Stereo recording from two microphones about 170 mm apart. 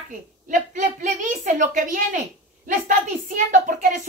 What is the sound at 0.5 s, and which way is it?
A woman's voice, 45° right (ahead or behind).